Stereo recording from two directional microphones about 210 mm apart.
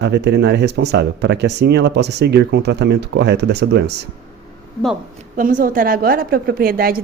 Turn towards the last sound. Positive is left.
turn(degrees=-45)  # may be behind; listen again after turning